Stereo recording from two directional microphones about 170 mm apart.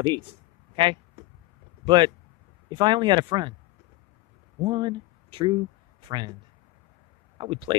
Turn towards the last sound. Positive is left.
turn(degrees=-30)  # may be behind; listen again after turning